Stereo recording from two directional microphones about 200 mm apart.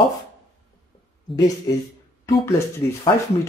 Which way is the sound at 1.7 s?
15° left (ahead or behind).